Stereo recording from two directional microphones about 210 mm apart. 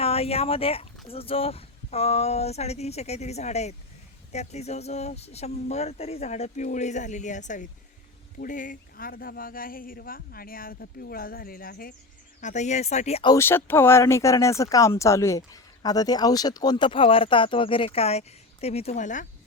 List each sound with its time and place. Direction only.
0.0 s speech: 30° left (ahead or behind); by 11.9 s 45° left (ahead or behind)
12.4 s speech: 35° left (ahead or behind)
13.3 s speech: 10° left (ahead or behind); by 19.3 s 35° left (ahead or behind)